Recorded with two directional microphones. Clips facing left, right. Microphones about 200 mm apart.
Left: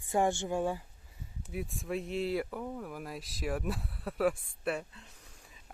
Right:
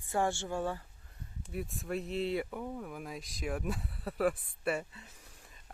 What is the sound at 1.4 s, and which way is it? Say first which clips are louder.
Speech: left 1 dB; centre (ahead or behind).